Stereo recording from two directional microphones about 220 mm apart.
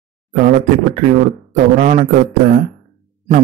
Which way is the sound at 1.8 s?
35° right (ahead or behind).